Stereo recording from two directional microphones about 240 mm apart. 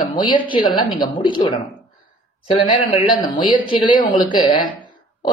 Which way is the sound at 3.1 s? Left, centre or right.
Centre.